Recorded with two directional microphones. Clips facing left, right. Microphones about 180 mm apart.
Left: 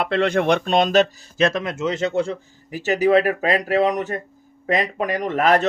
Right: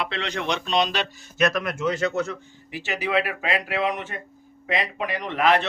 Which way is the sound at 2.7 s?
40° left (ahead or behind).